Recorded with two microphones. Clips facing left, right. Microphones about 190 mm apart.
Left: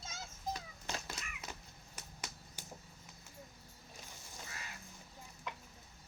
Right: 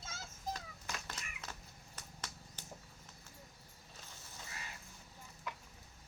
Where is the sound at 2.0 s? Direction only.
10° left (ahead or behind).